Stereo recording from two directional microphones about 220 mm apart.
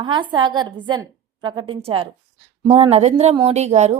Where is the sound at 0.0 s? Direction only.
20° right (ahead or behind).